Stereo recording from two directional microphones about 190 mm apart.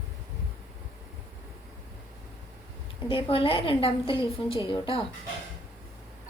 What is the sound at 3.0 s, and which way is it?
A woman's voice, 25° left (ahead or behind).